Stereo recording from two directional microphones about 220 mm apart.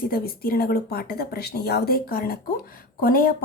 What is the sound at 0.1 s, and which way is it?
A woman's voice, 45° left (ahead or behind).